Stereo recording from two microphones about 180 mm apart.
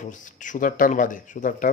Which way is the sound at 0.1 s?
45° left (ahead or behind).